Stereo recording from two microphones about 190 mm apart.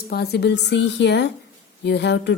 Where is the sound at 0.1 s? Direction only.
60° left (ahead or behind).